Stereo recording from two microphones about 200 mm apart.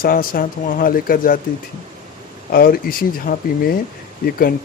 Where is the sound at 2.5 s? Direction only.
45° left (ahead or behind).